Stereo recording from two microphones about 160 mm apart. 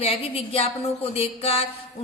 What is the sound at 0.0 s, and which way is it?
Speech, 40° left (ahead or behind).